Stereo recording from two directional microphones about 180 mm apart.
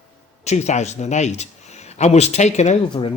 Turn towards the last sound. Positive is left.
turn(degrees=40)  # may be behind; listen again after turning